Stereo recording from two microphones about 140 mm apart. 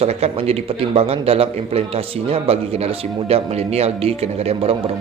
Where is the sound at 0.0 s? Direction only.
45° right (ahead or behind).